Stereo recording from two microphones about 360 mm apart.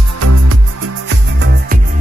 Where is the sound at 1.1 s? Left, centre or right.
Right.